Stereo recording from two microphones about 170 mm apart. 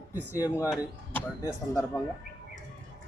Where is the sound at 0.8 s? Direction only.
15° left (ahead or behind).